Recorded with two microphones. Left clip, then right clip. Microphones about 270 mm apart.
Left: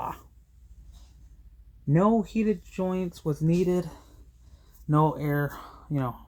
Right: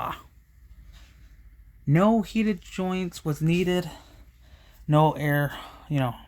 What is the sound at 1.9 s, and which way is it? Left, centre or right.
Speech, right.